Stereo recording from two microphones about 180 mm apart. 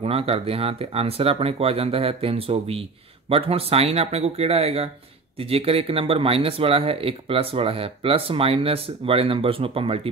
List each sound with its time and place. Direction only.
0.0 s speech: 30° right (ahead or behind)